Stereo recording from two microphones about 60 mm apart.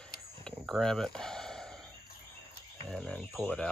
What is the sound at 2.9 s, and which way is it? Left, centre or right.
Speech, centre.